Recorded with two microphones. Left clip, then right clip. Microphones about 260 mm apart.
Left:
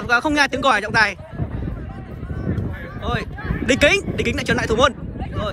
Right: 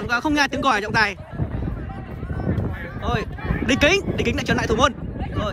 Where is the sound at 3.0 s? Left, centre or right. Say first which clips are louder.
Even; centre.